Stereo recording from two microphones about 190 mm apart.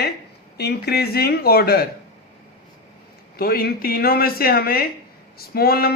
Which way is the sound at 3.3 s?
55° left (ahead or behind).